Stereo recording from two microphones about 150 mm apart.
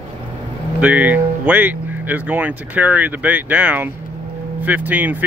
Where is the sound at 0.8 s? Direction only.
10° right (ahead or behind).